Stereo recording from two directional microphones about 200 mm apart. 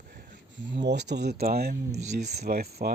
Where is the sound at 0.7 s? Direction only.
60° right (ahead or behind).